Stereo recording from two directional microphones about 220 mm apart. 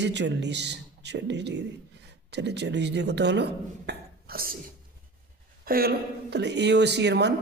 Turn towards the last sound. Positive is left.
turn(degrees=-50)  # may be behind; listen again after turning